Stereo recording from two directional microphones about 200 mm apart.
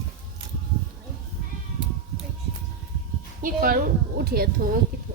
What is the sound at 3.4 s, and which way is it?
Speech, 45° right (ahead or behind).